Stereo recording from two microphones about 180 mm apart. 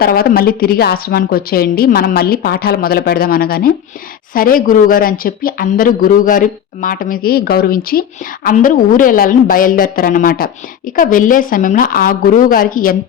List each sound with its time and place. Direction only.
0.0 s a woman's voice: 55° left (ahead or behind)